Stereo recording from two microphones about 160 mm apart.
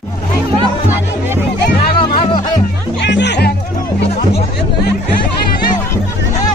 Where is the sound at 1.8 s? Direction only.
30° left (ahead or behind).